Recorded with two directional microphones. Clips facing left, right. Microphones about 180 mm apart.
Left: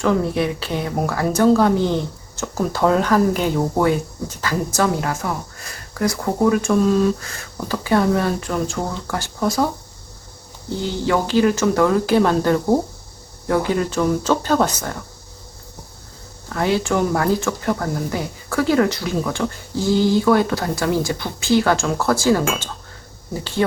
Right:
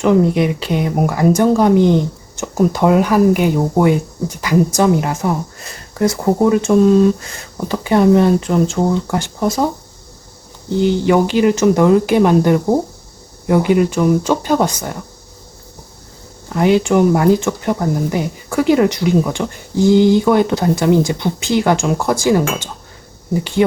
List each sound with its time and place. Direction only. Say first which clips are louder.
0.0 s speech: right 6 dB; 20° right (ahead or behind)
10.8 s speech: right 8 dB; 20° right (ahead or behind)
16.5 s speech: right 6 dB; 20° right (ahead or behind)